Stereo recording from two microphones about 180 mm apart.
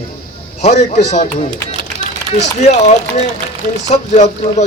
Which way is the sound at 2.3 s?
40° left (ahead or behind).